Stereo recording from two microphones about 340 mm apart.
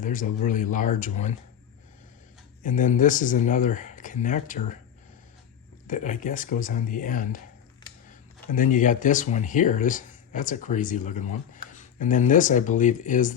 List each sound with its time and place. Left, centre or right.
0.0 s speech: left
2.6 s speech: left
5.9 s speech: left
8.5 s speech: left